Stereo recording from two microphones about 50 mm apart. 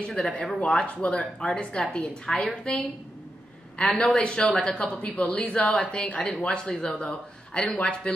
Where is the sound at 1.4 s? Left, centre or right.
Centre.